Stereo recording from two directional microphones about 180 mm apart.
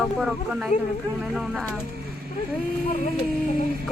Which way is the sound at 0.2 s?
5° right (ahead or behind).